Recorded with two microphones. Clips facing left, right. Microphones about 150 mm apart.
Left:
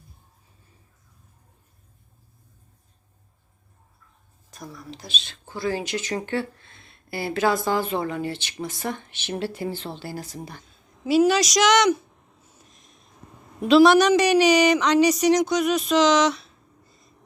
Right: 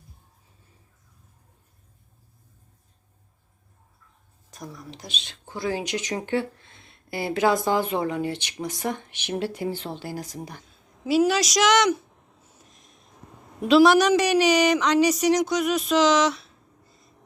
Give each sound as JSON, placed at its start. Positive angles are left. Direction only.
{"t": 4.5, "sound": "speech", "side_deg": -20}
{"t": 11.0, "sound": "speech", "side_deg": 0}
{"t": 13.6, "sound": "speech", "side_deg": -5}